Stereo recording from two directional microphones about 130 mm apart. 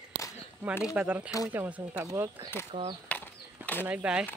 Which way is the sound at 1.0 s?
10° right (ahead or behind).